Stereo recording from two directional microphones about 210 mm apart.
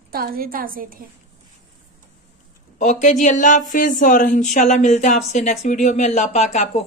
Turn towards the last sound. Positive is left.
turn(degrees=35)  # may be behind; listen again after turning